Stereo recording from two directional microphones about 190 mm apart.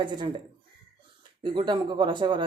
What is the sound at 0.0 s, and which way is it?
Speech, 25° right (ahead or behind).